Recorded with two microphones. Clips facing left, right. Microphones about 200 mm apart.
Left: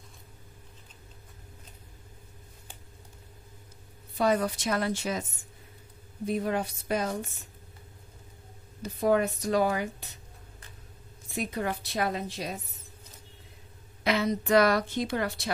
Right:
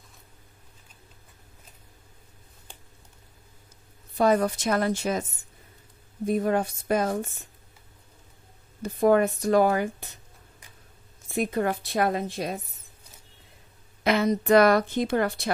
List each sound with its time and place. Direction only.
4.2 s a woman's voice: 45° right (ahead or behind)
6.2 s a woman's voice: 45° right (ahead or behind)
8.8 s a woman's voice: 50° right (ahead or behind)
11.3 s a woman's voice: 50° right (ahead or behind)
14.0 s a woman's voice: 50° right (ahead or behind)